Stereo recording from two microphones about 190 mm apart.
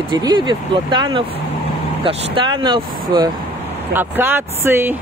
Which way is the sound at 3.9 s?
10° right (ahead or behind).